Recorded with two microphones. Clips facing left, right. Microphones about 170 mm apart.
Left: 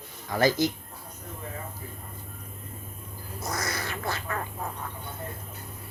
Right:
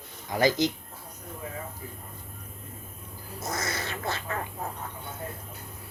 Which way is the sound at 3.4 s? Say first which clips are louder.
Even; 25° right (ahead or behind).